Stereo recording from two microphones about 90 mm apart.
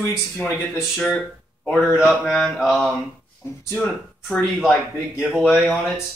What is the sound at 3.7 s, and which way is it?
Speech, 15° left (ahead or behind).